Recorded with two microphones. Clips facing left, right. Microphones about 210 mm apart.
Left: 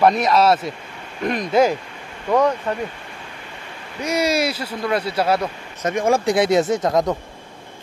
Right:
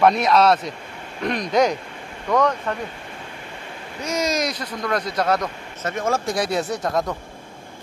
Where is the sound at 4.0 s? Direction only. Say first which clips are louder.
Left 3 dB; 10° left (ahead or behind).